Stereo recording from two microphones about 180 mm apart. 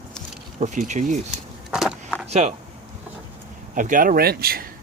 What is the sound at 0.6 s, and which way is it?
Speech, 40° right (ahead or behind).